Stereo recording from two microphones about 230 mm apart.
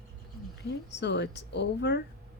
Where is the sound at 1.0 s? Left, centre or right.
Left.